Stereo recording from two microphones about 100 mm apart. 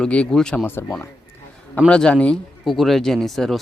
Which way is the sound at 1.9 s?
10° left (ahead or behind).